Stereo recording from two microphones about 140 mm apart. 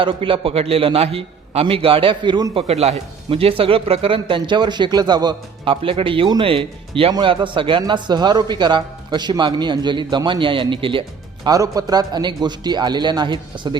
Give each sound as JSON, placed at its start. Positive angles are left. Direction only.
{"t": 0.0, "sound": "a man's voice", "side_deg": -40}
{"t": 2.6, "sound": "a man's voice", "side_deg": -50}
{"t": 11.4, "sound": "a man's voice", "side_deg": -25}